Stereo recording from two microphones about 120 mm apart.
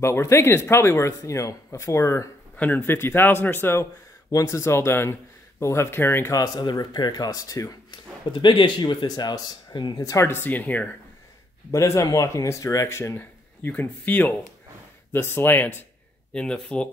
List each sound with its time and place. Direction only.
0.0 s speech: 25° left (ahead or behind)
2.5 s a man's voice: 15° left (ahead or behind)
8.3 s speech: 40° left (ahead or behind)
9.9 s a man's voice: 25° left (ahead or behind)
11.7 s a man's voice: 25° left (ahead or behind); by 16.9 s 10° left (ahead or behind)